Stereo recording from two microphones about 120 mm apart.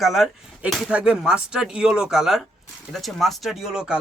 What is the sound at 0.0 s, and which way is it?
Speech, centre (ahead or behind).